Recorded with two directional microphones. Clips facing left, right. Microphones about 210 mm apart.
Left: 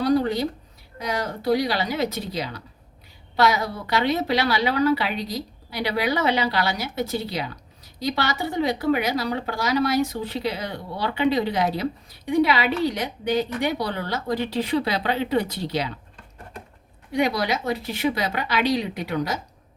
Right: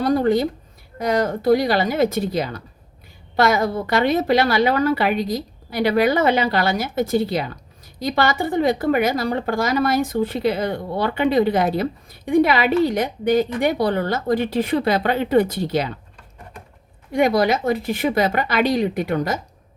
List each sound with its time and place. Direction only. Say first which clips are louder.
0.0 s a woman's voice: right 3 dB; 50° right (ahead or behind)
17.1 s a woman's voice: right 6 dB; 50° right (ahead or behind)